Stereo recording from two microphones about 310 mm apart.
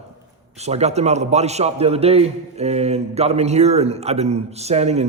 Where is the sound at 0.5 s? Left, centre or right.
Right.